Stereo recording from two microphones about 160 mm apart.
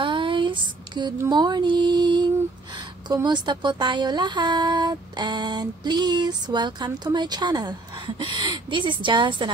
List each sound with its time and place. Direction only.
0.0 s a sound: 30° right (ahead or behind)
1.1 s music: 20° right (ahead or behind)
3.1 s a woman's voice: 25° right (ahead or behind)